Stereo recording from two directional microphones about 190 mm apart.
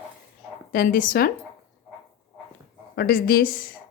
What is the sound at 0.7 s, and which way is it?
Speech, 45° left (ahead or behind).